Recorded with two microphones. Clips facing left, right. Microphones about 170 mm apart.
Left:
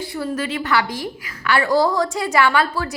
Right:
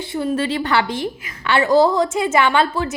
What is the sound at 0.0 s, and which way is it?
A woman's voice, 20° right (ahead or behind).